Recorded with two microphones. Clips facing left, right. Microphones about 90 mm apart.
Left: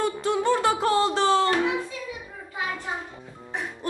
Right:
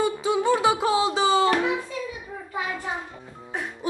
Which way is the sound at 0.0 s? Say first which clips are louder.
Right 1 dB; 5° right (ahead or behind).